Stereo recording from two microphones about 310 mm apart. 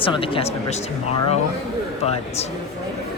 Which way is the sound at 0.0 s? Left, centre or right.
Centre.